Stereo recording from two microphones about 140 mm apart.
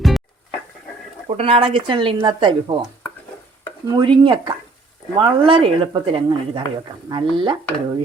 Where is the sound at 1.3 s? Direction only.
45° right (ahead or behind).